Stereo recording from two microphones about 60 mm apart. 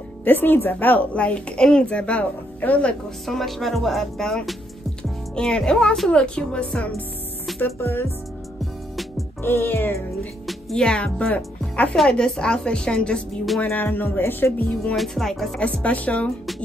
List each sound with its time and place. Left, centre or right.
0.2 s a woman's voice: left
3.3 s a woman's voice: centre
7.6 s music: left
9.4 s music: left
10.8 s a woman's voice: centre
11.9 s a woman's voice: centre
13.7 s music: left
15.0 s speech: centre
15.6 s a woman's voice: left